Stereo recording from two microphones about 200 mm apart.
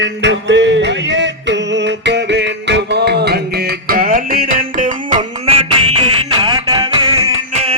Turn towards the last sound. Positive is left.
turn(degrees=-20)  # may be behind; listen again after turning